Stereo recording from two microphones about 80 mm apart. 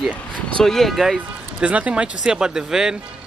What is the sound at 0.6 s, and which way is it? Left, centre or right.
Speech, centre.